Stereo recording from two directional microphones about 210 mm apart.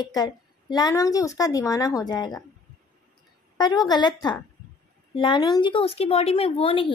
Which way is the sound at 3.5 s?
20° left (ahead or behind).